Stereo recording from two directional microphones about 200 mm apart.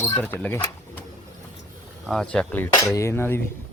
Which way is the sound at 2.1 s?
5° left (ahead or behind).